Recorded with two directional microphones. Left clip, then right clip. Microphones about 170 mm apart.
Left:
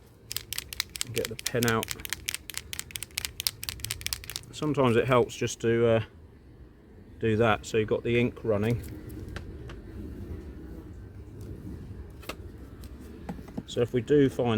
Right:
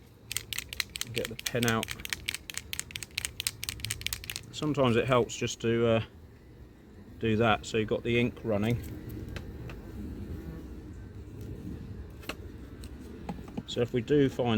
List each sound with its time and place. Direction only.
0.3 s typing: 60° left (ahead or behind)
3.8 s a sound: 65° left (ahead or behind)
4.5 s speech: 85° left; by 6.1 s 60° left (ahead or behind)
7.2 s speech: 65° left (ahead or behind); by 8.8 s 90° left
13.2 s a sound: 10° left (ahead or behind)
13.7 s speech: 65° left (ahead or behind)